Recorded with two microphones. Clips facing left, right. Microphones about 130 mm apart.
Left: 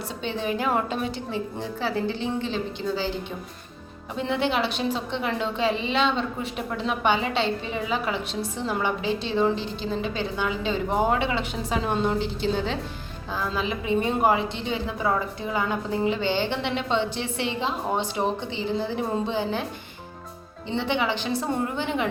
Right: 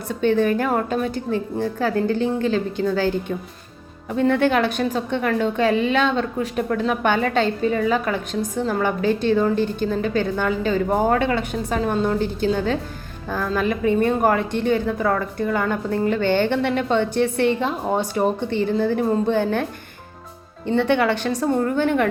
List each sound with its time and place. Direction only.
0.1 s a woman's voice: 50° right (ahead or behind)
20.7 s speech: 55° right (ahead or behind)